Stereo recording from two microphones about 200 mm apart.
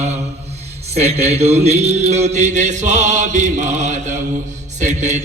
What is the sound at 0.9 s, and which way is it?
A man's voice, 30° right (ahead or behind).